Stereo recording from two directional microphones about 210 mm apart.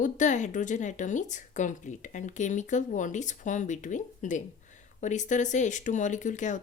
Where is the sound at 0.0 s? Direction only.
35° left (ahead or behind).